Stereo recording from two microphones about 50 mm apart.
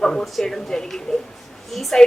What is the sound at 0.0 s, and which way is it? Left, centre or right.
A woman's voice, centre.